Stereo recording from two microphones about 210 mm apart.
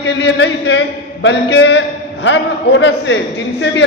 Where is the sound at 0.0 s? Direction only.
60° left (ahead or behind).